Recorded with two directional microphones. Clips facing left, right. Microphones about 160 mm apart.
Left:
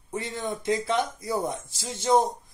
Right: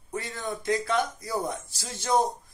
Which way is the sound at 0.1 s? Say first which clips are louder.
Left 2 dB; 20° left (ahead or behind).